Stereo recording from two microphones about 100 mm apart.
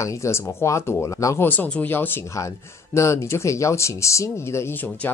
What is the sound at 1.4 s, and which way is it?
Speech, 20° left (ahead or behind).